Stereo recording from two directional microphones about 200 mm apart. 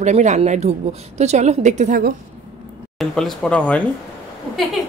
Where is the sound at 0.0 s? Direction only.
35° right (ahead or behind).